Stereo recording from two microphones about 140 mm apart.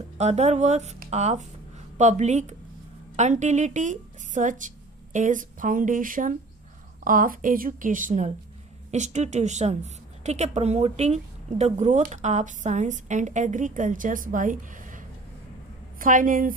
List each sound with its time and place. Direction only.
0.2 s a woman's voice: 50° right (ahead or behind); by 16.6 s 80° right